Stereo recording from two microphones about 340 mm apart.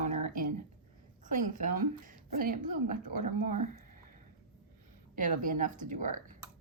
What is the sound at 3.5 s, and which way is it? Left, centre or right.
Speech, right.